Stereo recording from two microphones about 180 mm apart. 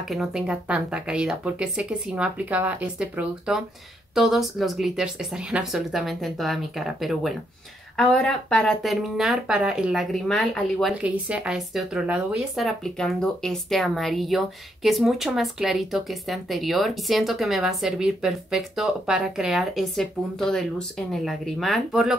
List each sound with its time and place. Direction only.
0.1 s speech: 5° right (ahead or behind)